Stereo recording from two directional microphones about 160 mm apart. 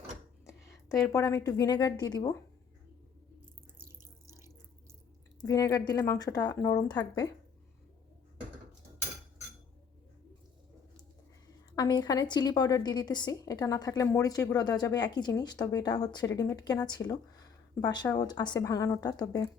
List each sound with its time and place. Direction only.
1.1 s a woman's voice: 20° left (ahead or behind)
4.3 s water: 15° right (ahead or behind)
5.4 s a woman's voice: 20° left (ahead or behind)
11.8 s a woman's voice: 25° left (ahead or behind)